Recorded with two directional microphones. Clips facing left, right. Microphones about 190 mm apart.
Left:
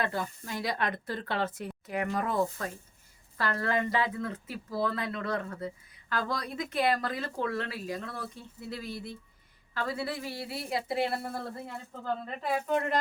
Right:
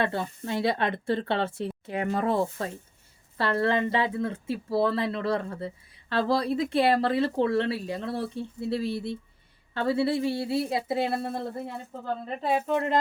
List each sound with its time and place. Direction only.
0.0 s speech: 30° right (ahead or behind)